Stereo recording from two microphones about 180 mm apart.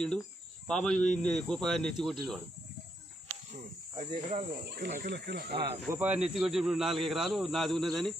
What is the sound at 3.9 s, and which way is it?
Speech, 35° right (ahead or behind).